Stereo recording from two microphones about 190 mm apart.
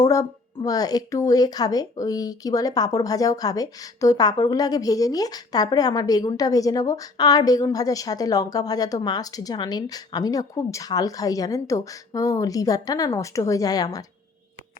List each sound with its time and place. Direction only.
0.0 s a woman's voice: 20° left (ahead or behind)